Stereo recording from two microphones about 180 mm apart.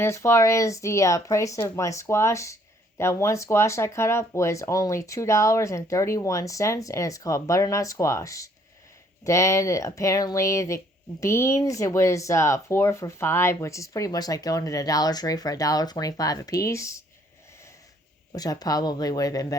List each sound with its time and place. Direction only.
0.0 s speech: 15° left (ahead or behind)
18.3 s speech: 20° left (ahead or behind)